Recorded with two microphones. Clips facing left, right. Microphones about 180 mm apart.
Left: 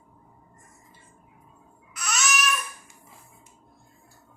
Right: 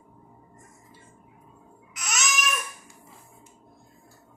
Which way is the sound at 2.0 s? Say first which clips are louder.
Left 2 dB; 20° right (ahead or behind).